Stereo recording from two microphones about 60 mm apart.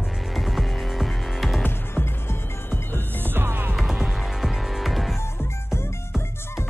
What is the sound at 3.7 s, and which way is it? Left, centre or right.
Music, centre.